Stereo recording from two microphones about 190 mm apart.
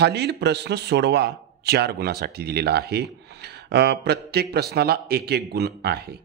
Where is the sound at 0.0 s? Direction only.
60° right (ahead or behind).